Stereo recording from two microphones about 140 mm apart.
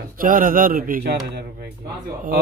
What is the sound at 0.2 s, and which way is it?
Speech, 80° right.